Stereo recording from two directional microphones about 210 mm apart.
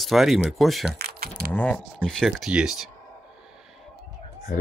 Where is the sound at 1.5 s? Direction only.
5° left (ahead or behind).